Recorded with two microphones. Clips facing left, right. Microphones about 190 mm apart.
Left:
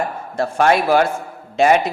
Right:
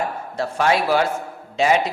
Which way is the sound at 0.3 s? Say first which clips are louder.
Left 4 dB; 50° left (ahead or behind).